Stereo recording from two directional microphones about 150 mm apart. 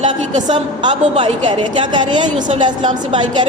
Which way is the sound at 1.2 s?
35° right (ahead or behind).